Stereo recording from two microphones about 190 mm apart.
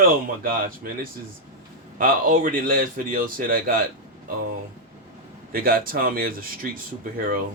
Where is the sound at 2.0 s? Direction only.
45° right (ahead or behind).